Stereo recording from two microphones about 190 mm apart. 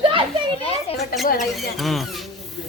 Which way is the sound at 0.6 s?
30° left (ahead or behind).